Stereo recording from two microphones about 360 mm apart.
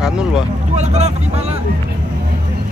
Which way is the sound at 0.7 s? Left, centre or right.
Centre.